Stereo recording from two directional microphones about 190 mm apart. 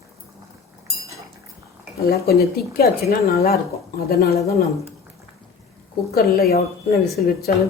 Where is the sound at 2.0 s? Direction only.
55° left (ahead or behind).